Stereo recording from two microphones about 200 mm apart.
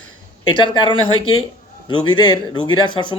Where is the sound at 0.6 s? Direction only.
25° left (ahead or behind).